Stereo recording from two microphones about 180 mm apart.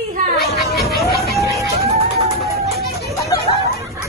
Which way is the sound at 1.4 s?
15° right (ahead or behind).